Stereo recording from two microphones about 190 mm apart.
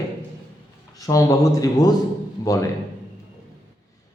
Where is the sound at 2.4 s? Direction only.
20° left (ahead or behind).